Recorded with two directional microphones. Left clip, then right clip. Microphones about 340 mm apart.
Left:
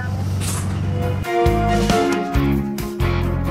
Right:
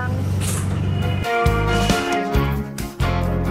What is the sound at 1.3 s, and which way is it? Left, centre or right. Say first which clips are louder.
Music: left 2 dB; centre.